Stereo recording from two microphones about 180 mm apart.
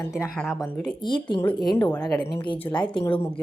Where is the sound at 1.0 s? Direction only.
25° left (ahead or behind).